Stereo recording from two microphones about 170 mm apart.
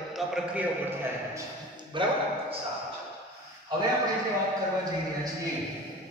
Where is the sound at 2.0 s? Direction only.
30° right (ahead or behind).